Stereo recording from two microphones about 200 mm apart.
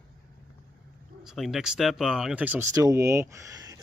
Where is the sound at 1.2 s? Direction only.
Centre (ahead or behind).